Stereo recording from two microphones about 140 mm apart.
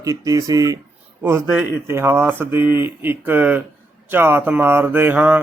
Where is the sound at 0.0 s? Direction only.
25° right (ahead or behind).